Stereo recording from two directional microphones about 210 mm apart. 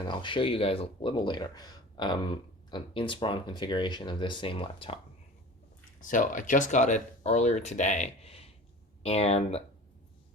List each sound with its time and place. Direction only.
0.1 s speech: 25° left (ahead or behind)
6.0 s speech: 40° left (ahead or behind)